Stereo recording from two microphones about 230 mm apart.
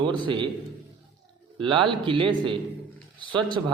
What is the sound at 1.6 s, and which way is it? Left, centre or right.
A man's voice, right.